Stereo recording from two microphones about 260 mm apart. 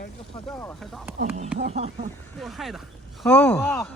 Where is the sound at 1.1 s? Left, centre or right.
Right.